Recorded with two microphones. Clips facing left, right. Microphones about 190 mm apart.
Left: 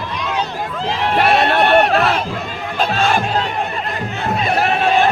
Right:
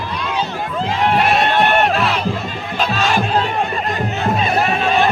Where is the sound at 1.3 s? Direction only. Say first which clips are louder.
Left 2 dB; 60° left (ahead or behind).